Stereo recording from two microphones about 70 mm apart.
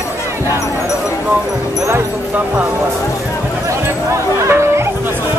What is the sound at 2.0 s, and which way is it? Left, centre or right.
Speech, right.